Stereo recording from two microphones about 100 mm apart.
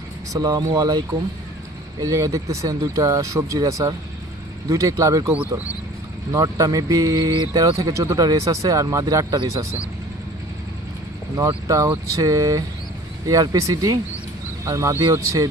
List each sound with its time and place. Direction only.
0.3 s speech: 40° right (ahead or behind)
6.3 s speech: 35° right (ahead or behind)
11.3 s speech: 35° right (ahead or behind)